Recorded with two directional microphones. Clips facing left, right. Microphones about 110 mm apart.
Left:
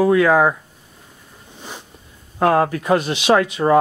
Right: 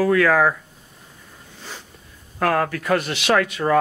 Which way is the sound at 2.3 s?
25° left (ahead or behind).